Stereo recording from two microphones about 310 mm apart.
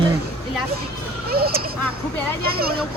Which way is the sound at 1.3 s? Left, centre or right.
Right.